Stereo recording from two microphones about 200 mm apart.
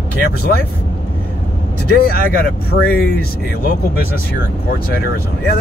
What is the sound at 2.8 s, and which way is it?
Speech, 5° left (ahead or behind).